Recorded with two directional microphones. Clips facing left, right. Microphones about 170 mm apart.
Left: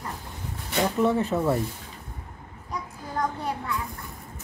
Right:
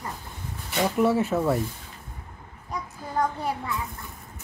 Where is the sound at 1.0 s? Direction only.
5° right (ahead or behind).